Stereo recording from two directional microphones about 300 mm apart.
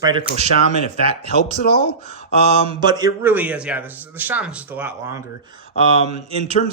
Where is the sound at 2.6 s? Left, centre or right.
Centre.